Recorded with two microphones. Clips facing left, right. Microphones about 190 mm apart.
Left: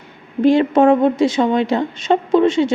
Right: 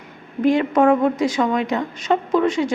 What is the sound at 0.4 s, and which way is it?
A woman's voice, 30° left (ahead or behind).